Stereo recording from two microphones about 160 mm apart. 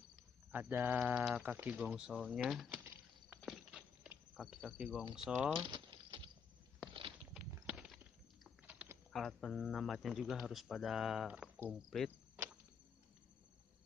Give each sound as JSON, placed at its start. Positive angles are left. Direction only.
{"t": 0.5, "sound": "speech", "side_deg": -10}
{"t": 4.3, "sound": "speech", "side_deg": 0}
{"t": 5.7, "sound": "a sound", "side_deg": -30}
{"t": 6.9, "sound": "walk", "side_deg": -30}
{"t": 7.6, "sound": "clip-clop", "side_deg": -5}
{"t": 8.6, "sound": "typing", "side_deg": -10}
{"t": 9.1, "sound": "speech", "side_deg": 0}